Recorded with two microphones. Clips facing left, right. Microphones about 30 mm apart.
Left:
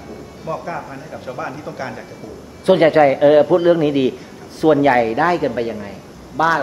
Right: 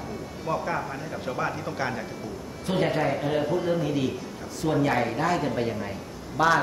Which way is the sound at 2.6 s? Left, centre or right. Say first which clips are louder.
Left 13 dB; left.